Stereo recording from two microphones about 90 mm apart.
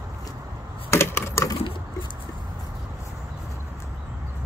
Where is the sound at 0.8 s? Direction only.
30° left (ahead or behind).